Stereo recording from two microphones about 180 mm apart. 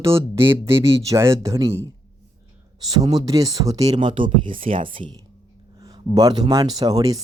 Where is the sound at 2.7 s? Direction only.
20° right (ahead or behind).